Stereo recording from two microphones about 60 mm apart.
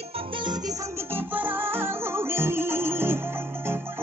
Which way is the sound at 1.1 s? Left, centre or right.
Right.